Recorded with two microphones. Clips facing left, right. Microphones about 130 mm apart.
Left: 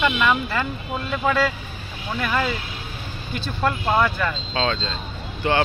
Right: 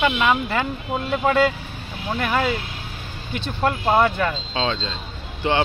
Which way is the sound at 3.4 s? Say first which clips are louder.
Right 2 dB; 20° right (ahead or behind).